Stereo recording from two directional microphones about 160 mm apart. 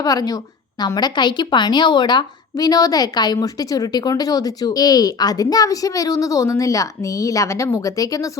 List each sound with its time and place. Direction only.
0.0 s a woman's voice: 25° left (ahead or behind)